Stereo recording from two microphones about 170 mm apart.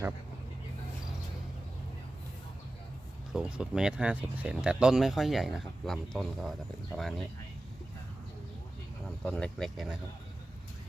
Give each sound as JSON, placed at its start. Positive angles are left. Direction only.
{"t": 3.3, "sound": "speech", "side_deg": -5}
{"t": 9.0, "sound": "speech", "side_deg": 5}